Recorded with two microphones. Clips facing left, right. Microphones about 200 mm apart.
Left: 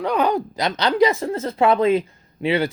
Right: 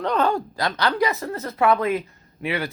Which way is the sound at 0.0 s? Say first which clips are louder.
Left 2 dB; 10° left (ahead or behind).